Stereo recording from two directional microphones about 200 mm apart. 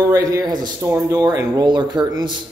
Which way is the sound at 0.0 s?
15° right (ahead or behind).